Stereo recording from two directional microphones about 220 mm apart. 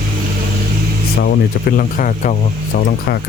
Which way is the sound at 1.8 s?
35° left (ahead or behind).